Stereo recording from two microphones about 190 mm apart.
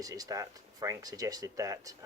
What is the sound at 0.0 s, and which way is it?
Speech, 20° right (ahead or behind).